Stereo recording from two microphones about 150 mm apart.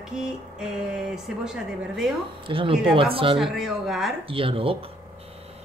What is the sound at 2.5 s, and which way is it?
Speech, 35° right (ahead or behind).